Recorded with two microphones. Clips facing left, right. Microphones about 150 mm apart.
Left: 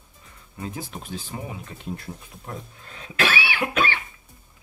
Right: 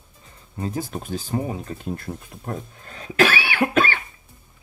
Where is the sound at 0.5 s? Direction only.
40° right (ahead or behind).